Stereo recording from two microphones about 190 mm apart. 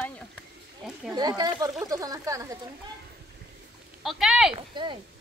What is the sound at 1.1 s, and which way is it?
Speech, 20° right (ahead or behind).